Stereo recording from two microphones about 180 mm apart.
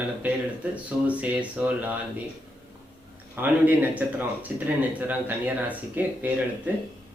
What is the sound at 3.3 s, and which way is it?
A man's voice, 10° right (ahead or behind).